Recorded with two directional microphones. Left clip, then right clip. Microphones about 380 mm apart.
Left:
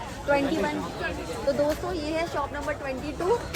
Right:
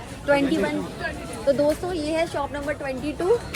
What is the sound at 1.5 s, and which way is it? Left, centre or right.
Speech, centre.